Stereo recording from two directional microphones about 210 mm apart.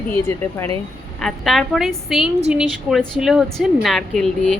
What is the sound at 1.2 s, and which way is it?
Speech, centre (ahead or behind).